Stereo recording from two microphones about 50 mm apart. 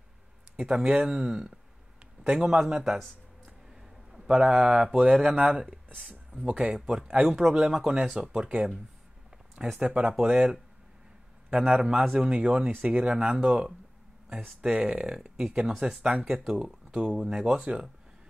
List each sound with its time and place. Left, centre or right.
0.6 s speech: centre
4.3 s speech: right
5.9 s a sound: centre
6.4 s speech: right
8.4 s speech: right
9.8 s speech: centre
11.8 s speech: centre
12.3 s speech: right
16.9 s speech: centre